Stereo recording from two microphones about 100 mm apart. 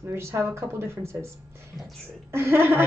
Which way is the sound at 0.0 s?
25° right (ahead or behind).